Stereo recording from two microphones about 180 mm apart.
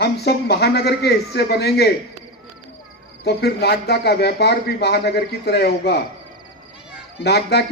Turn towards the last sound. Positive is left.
turn(degrees=65)  # may be behind; listen again after turning